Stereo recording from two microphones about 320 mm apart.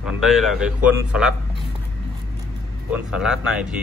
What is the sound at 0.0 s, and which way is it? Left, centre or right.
A man's voice, centre.